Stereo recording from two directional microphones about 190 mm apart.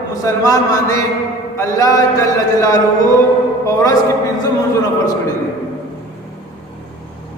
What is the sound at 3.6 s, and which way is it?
Speech, 20° left (ahead or behind).